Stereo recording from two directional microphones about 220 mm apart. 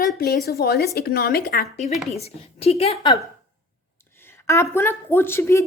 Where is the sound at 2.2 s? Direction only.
30° left (ahead or behind).